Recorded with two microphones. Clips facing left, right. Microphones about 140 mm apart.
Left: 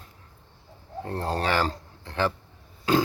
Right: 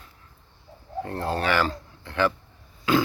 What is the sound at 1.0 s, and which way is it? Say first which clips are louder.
Speech: right 1 dB; 35° left (ahead or behind).